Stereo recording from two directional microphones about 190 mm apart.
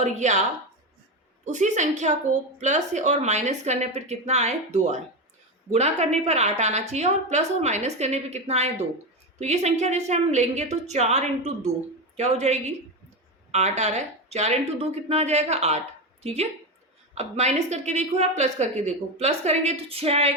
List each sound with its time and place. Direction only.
0.0 s a woman's voice: 40° right (ahead or behind)
1.5 s a woman's voice: 40° right (ahead or behind)